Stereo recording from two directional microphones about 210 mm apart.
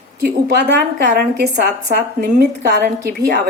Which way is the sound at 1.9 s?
50° right (ahead or behind).